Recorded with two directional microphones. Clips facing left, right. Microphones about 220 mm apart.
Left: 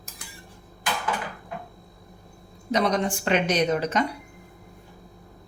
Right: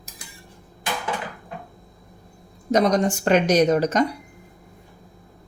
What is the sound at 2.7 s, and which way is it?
Speech, 45° right (ahead or behind).